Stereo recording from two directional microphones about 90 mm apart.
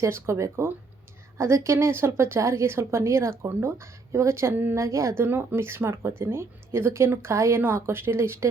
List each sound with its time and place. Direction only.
0.0 s a woman's voice: 30° right (ahead or behind)